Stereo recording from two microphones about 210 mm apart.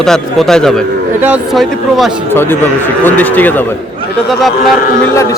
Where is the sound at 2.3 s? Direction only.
10° left (ahead or behind).